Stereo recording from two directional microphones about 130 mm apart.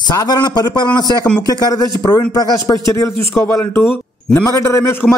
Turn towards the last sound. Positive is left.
turn(degrees=20)  # may be behind; listen again after turning